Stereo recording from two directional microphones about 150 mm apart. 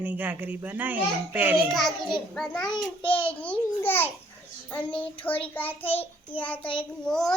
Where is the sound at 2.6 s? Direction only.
30° left (ahead or behind).